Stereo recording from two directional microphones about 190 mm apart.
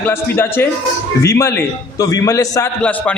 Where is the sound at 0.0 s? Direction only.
10° left (ahead or behind).